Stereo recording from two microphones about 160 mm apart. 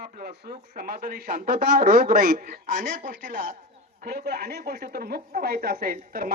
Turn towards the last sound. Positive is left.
turn(degrees=-65)  # may be behind; listen again after turning